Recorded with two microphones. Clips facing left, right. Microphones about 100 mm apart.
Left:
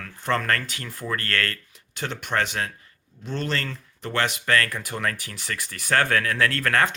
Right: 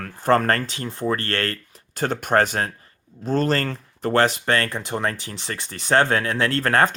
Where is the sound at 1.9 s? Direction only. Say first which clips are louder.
Right 7 dB; 45° right (ahead or behind).